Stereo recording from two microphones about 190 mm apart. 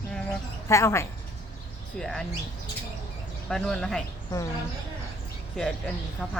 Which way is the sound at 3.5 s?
5° left (ahead or behind).